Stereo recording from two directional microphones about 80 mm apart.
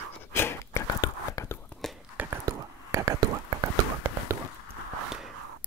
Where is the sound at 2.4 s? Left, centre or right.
Right.